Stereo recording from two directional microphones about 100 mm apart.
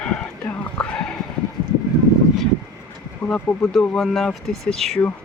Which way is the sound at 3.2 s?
25° left (ahead or behind).